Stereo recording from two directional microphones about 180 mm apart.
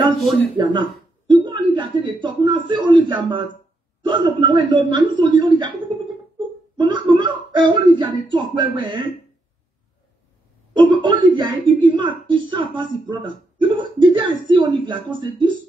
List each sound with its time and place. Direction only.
0.2 s speech: centre (ahead or behind)
1.2 s a man's voice: 25° right (ahead or behind)
6.8 s a woman's voice: 25° right (ahead or behind)
10.8 s a woman's voice: 25° right (ahead or behind)